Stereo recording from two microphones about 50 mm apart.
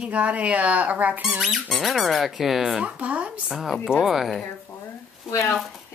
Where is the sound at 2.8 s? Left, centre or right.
Right.